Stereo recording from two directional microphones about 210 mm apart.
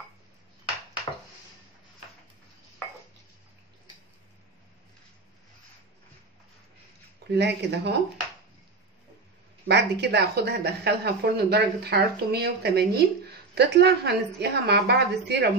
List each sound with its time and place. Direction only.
7.2 s speech: 55° right (ahead or behind)
9.7 s speech: 50° right (ahead or behind)